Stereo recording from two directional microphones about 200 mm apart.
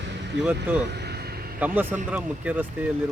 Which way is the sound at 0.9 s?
55° right (ahead or behind).